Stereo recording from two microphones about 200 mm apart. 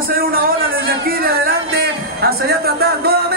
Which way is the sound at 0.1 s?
45° right (ahead or behind).